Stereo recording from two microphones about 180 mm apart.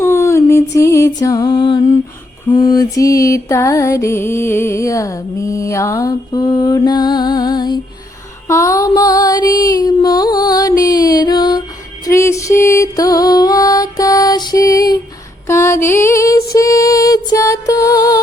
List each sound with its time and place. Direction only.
0.0 s music: 15° left (ahead or behind)
2.5 s mantra: 25° left (ahead or behind)
8.4 s female singing: 15° left (ahead or behind)
12.0 s music: 15° left (ahead or behind)